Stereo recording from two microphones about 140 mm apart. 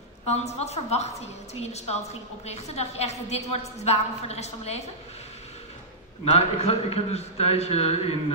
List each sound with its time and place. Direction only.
0.3 s a woman's voice: 50° left (ahead or behind)
6.3 s a woman's voice: 45° left (ahead or behind)